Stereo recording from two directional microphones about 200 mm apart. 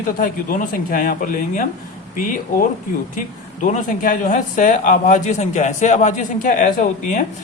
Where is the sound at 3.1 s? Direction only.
35° left (ahead or behind).